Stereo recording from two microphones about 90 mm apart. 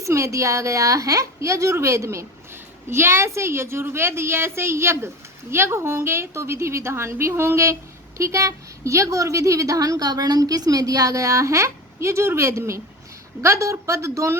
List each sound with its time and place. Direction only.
0.0 s a woman's voice: 35° right (ahead or behind)